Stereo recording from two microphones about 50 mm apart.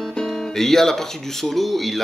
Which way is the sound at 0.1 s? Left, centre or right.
Centre.